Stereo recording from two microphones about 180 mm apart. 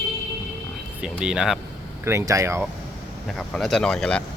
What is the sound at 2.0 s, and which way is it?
Speech, 15° right (ahead or behind).